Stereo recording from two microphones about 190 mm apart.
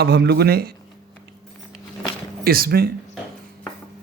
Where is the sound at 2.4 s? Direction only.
50° right (ahead or behind).